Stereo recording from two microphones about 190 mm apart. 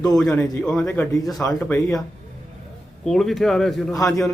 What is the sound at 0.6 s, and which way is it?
Speech, 5° left (ahead or behind).